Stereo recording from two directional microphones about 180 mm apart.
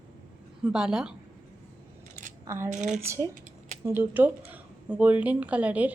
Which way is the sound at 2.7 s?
40° right (ahead or behind).